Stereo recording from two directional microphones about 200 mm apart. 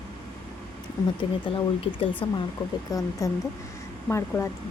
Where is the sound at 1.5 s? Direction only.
25° left (ahead or behind).